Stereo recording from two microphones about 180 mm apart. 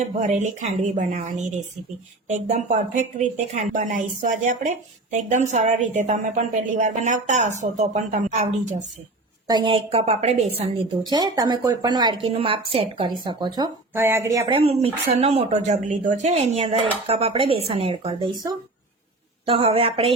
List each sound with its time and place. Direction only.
0.0 s speech: 40° right (ahead or behind)
9.5 s speech: 25° right (ahead or behind)
11.1 s speech: 20° right (ahead or behind)
13.9 s speech: 15° right (ahead or behind)
14.5 s speech: 35° right (ahead or behind)
19.5 s speech: 30° right (ahead or behind)